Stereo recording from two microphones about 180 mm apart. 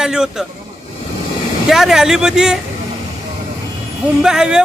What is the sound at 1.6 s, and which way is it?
Speech, centre (ahead or behind).